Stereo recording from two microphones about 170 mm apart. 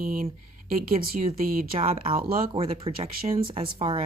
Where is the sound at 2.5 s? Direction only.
35° right (ahead or behind).